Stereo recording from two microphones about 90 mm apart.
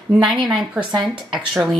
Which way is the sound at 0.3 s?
Centre (ahead or behind).